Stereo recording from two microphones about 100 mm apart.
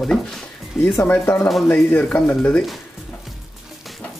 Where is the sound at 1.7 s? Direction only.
15° left (ahead or behind).